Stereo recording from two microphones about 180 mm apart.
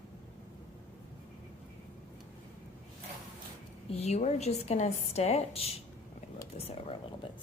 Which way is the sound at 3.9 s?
35° left (ahead or behind).